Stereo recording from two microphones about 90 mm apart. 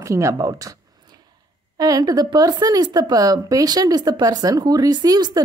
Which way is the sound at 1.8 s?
45° right (ahead or behind).